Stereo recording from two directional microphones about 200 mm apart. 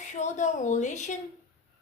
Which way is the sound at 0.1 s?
35° left (ahead or behind).